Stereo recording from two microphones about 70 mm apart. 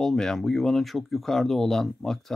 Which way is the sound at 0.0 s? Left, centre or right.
Centre.